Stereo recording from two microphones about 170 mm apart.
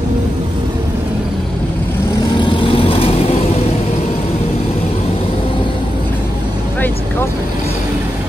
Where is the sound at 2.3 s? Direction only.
30° left (ahead or behind).